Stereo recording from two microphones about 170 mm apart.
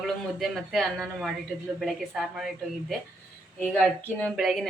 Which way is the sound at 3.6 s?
5° left (ahead or behind).